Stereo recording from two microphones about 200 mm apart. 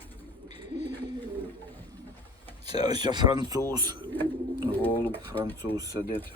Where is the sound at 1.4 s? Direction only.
10° left (ahead or behind).